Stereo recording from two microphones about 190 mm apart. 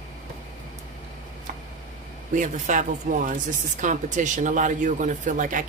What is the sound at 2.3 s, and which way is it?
Speech, 40° right (ahead or behind).